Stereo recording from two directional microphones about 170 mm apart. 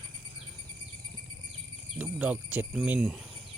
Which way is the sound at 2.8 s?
10° right (ahead or behind).